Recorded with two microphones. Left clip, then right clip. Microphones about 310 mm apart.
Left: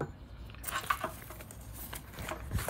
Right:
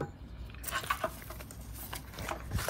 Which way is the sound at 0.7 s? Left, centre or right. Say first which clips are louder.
Even; centre.